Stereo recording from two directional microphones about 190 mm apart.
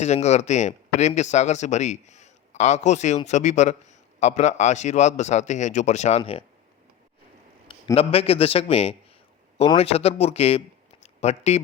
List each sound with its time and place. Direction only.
0.0 s a man's voice: 35° left (ahead or behind)
7.7 s a man's voice: 30° left (ahead or behind)
11.0 s a sound: 35° left (ahead or behind)